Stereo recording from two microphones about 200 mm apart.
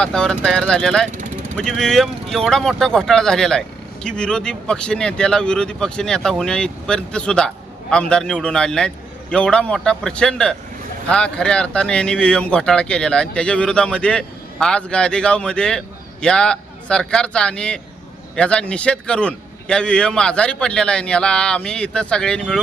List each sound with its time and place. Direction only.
0.0 s speech: 5° left (ahead or behind)